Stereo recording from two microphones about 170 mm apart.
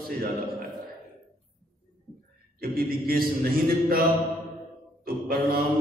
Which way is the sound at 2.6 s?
60° right (ahead or behind).